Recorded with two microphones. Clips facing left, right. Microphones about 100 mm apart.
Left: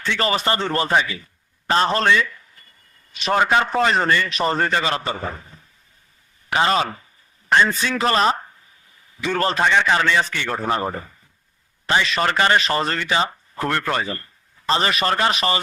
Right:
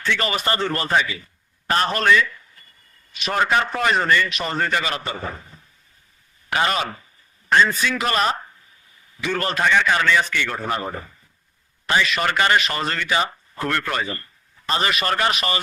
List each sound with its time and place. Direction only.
0.0 s a man's voice: 30° left (ahead or behind)
3.4 s a man's voice: 20° left (ahead or behind)
6.5 s a man's voice: 30° left (ahead or behind)